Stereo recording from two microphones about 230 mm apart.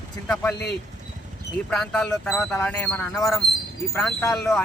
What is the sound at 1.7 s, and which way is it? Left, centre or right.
Speech, centre.